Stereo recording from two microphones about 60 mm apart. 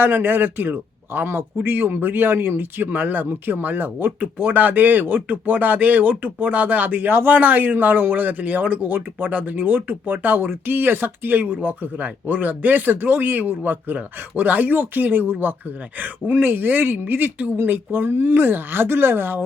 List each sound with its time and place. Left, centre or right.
0.0 s speech: right